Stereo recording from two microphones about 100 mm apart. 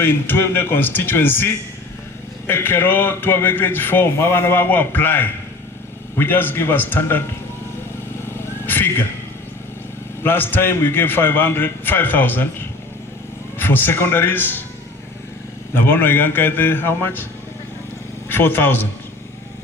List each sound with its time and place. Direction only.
0.0 s a man's voice: 20° left (ahead or behind)
8.6 s a sound: 20° left (ahead or behind)
10.2 s a man's voice: 20° left (ahead or behind)
15.7 s a man's voice: 20° left (ahead or behind)
18.3 s a man's voice: 20° left (ahead or behind)